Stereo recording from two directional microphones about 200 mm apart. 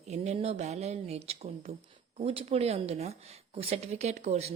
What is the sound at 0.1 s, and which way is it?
A woman's voice, 30° right (ahead or behind).